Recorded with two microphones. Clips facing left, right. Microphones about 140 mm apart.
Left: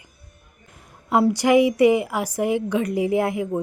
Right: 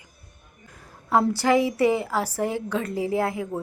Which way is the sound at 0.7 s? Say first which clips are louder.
Left 1 dB; 20° left (ahead or behind).